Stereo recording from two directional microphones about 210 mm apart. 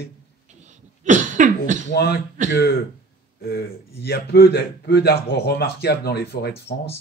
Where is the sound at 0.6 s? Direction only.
35° right (ahead or behind).